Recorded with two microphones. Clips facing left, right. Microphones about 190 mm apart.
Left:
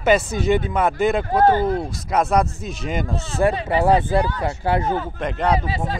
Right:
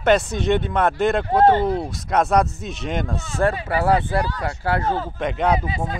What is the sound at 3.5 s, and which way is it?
Speech, 25° left (ahead or behind).